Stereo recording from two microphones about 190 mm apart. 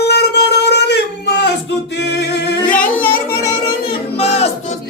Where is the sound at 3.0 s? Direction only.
10° left (ahead or behind).